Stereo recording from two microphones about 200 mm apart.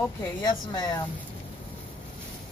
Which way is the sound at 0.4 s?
20° left (ahead or behind).